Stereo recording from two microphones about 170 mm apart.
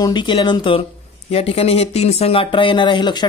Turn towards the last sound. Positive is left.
turn(degrees=25)  # may be behind; listen again after turning